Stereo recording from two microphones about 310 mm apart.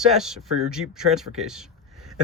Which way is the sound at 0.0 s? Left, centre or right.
Centre.